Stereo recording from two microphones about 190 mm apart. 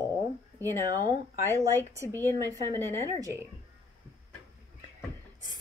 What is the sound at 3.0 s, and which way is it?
Speech, 15° right (ahead or behind).